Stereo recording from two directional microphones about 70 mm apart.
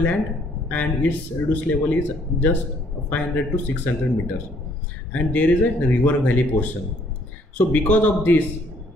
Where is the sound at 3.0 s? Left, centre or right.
Left.